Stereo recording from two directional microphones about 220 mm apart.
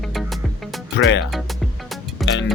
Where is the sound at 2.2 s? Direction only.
Centre (ahead or behind).